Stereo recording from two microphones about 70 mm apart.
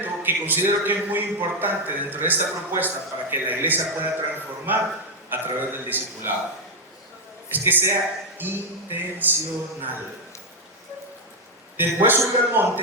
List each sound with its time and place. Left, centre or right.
0.0 s a man's voice: right
7.5 s a man's voice: right
11.8 s a man's voice: right